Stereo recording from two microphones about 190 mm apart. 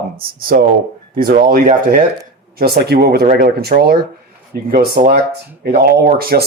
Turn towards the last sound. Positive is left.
turn(degrees=-55)  # may be behind; listen again after turning